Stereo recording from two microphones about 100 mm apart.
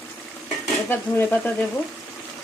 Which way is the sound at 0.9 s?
20° left (ahead or behind).